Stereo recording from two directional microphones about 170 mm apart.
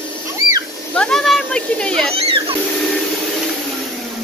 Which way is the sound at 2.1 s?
35° right (ahead or behind).